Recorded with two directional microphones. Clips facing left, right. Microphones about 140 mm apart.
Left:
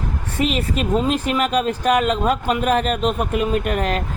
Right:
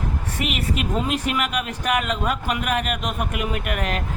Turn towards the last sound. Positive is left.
turn(degrees=35)  # may be behind; listen again after turning